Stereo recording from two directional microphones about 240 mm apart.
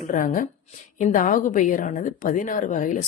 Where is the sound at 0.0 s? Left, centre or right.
Left.